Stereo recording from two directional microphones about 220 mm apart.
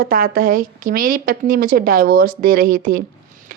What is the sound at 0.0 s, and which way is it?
Speech, 40° right (ahead or behind).